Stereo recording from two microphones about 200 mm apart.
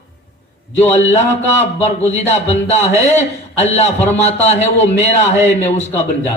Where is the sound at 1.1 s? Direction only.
35° left (ahead or behind).